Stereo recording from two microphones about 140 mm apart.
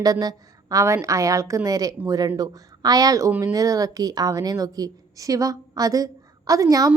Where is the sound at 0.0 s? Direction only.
30° right (ahead or behind).